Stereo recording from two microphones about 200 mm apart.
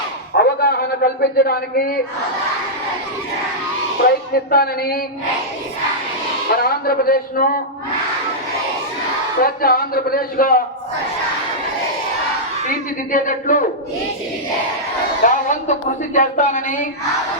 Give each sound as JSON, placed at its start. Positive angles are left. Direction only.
{"t": 0.3, "sound": "a sound", "side_deg": 50}
{"t": 4.0, "sound": "speech", "side_deg": 50}
{"t": 6.6, "sound": "speech", "side_deg": 50}
{"t": 9.4, "sound": "speech", "side_deg": 45}
{"t": 12.6, "sound": "speech", "side_deg": 40}
{"t": 15.2, "sound": "speech", "side_deg": 40}